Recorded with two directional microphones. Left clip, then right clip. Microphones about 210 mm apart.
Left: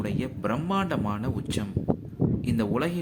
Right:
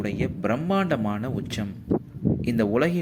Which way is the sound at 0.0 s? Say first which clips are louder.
Right 3 dB; 15° right (ahead or behind).